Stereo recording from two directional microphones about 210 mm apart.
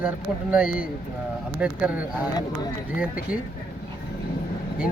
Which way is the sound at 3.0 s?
5° right (ahead or behind).